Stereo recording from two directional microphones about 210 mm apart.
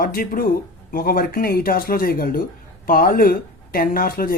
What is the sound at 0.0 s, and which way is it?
Speech, 45° left (ahead or behind).